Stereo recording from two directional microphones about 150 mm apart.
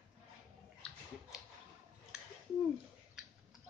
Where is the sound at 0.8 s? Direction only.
5° left (ahead or behind).